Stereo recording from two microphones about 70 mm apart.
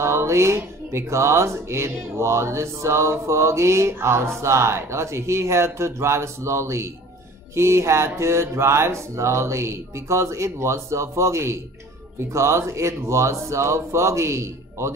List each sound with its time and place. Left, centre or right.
0.0 s music: right
12.3 s speech: right